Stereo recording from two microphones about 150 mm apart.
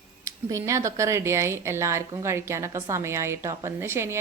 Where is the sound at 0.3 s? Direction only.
20° right (ahead or behind).